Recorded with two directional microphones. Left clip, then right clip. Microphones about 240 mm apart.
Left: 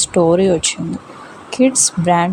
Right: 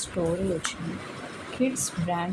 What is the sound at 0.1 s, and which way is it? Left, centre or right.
Speech, left.